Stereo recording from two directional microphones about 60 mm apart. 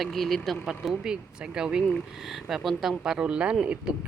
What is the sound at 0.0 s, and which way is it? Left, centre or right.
Speech, centre.